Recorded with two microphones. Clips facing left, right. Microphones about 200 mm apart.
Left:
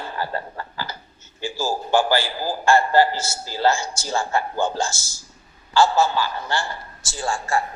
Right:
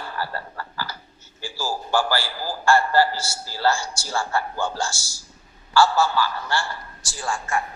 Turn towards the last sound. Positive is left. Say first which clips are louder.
# left 3 dB
turn(degrees=30)  # may be behind; listen again after turning